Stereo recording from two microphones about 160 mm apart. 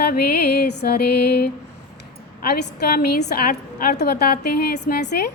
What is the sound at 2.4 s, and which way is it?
A woman's voice, 85° left.